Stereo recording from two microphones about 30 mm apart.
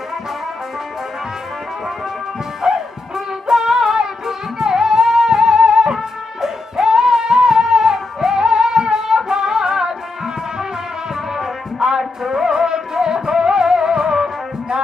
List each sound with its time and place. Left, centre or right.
2.6 s music: centre